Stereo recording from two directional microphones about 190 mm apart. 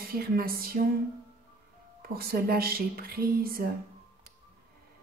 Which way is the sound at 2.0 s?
50° right (ahead or behind).